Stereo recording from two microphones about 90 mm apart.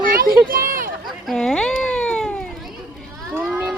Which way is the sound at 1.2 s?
5° left (ahead or behind).